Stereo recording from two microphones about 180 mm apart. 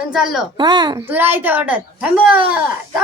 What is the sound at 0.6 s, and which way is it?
Speech, 25° right (ahead or behind).